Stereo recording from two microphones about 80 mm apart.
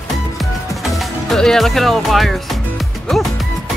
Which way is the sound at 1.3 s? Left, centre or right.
Centre.